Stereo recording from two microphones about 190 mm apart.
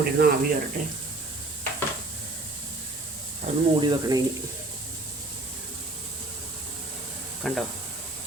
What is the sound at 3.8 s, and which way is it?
Speech, 20° right (ahead or behind).